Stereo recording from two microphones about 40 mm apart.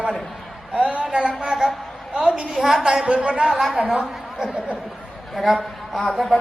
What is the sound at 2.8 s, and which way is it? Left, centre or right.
Speech, centre.